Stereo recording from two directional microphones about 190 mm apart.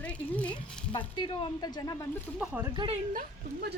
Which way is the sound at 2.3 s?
5° right (ahead or behind).